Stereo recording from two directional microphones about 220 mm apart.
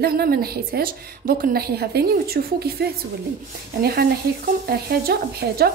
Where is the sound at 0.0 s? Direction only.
45° right (ahead or behind).